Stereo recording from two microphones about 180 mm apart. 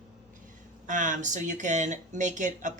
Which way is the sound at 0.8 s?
45° right (ahead or behind).